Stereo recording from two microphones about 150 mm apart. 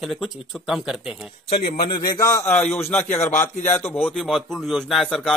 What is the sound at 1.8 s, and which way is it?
A man's voice, 30° left (ahead or behind).